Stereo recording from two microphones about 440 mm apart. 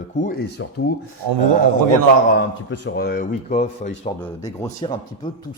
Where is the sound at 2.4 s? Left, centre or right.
Left.